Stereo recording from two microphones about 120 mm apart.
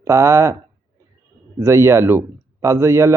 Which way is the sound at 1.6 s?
25° right (ahead or behind).